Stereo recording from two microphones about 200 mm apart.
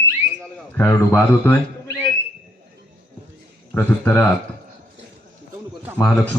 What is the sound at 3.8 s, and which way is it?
Speech, 10° left (ahead or behind).